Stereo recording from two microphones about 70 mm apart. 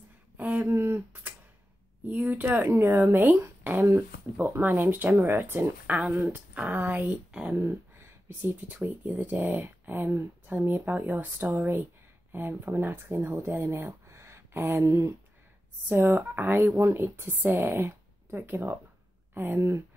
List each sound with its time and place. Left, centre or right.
0.4 s a sound: right
2.0 s speech: right
4.4 s speech: right
5.9 s speech: centre
7.1 s speech: centre
7.5 s speech: right
15.9 s speech: right